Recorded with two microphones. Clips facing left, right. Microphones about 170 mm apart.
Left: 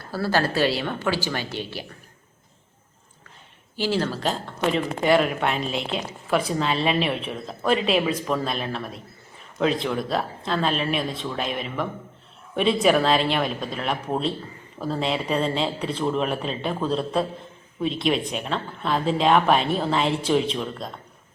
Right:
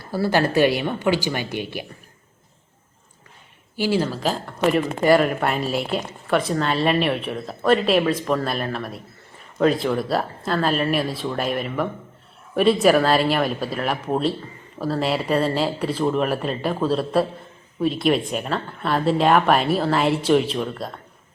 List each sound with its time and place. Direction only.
0.1 s a woman's voice: 15° right (ahead or behind)
3.8 s speech: 10° right (ahead or behind)